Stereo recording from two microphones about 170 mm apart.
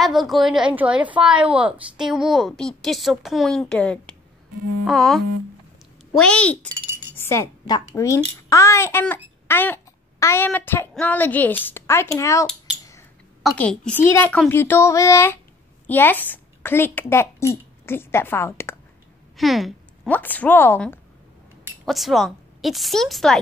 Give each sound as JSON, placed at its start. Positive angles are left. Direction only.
{"t": 0.0, "sound": "a woman's voice", "side_deg": 0}
{"t": 13.4, "sound": "a woman's voice", "side_deg": 5}
{"t": 19.3, "sound": "speech", "side_deg": 0}
{"t": 20.1, "sound": "a woman's voice", "side_deg": 10}
{"t": 21.8, "sound": "a woman's voice", "side_deg": 0}